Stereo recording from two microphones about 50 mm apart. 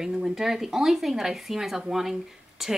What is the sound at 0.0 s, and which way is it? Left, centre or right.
Speech, centre.